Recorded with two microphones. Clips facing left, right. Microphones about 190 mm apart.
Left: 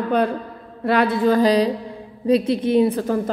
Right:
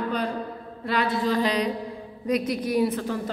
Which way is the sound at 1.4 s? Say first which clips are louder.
Left 8 dB; 35° left (ahead or behind).